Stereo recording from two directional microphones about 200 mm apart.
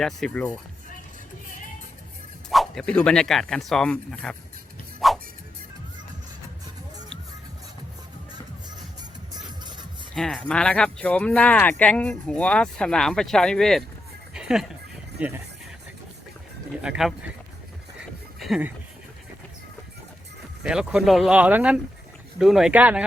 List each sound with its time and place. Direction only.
0.0 s speech: 5° left (ahead or behind)
2.5 s speech: centre (ahead or behind)
4.9 s music: centre (ahead or behind)
9.3 s music: 20° right (ahead or behind)
10.2 s speech: 5° left (ahead or behind)
14.3 s music: 5° right (ahead or behind)
15.2 s speech: 5° right (ahead or behind)
16.8 s speech: 5° right (ahead or behind)
18.3 s a sound: centre (ahead or behind)
20.7 s speech: 5° right (ahead or behind)